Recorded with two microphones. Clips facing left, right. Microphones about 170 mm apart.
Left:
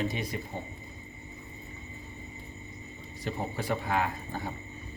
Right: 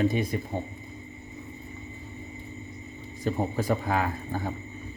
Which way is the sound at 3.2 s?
45° right (ahead or behind).